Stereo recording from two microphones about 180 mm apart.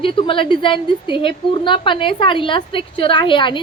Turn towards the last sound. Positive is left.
turn(degrees=25)  # may be behind; listen again after turning